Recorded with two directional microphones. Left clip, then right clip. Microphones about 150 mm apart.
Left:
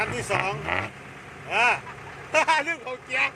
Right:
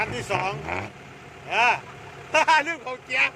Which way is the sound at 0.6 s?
20° left (ahead or behind).